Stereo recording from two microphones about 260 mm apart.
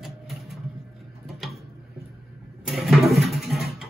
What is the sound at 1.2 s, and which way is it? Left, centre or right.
Tick-tock, centre.